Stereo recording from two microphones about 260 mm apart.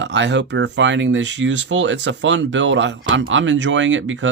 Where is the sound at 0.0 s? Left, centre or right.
Right.